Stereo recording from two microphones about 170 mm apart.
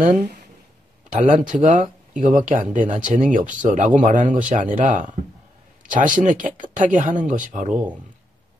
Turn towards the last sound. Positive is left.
turn(degrees=-50)  # may be behind; listen again after turning